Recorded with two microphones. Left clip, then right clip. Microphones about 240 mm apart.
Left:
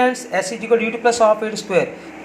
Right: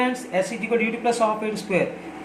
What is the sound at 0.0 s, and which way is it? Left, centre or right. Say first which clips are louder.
A woman's voice: left 5 dB; centre.